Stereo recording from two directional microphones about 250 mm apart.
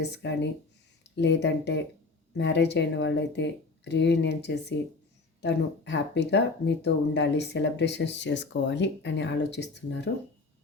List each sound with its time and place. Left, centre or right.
0.0 s speech: left